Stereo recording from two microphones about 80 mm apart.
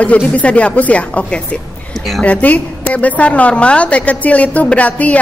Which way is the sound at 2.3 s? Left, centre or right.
Centre.